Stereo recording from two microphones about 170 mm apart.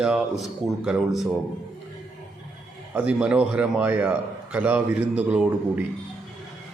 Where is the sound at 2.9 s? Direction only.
5° right (ahead or behind).